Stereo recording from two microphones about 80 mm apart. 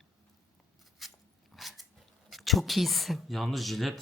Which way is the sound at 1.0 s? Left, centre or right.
Centre.